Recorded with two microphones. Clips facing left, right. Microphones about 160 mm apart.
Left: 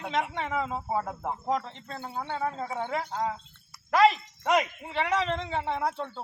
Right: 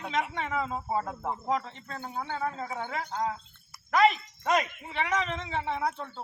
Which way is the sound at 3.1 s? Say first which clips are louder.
Left 1 dB; 5° left (ahead or behind).